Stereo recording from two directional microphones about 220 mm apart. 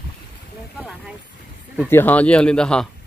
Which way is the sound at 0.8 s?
5° right (ahead or behind).